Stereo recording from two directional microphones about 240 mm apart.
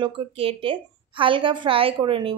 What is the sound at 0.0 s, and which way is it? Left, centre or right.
A woman's voice, right.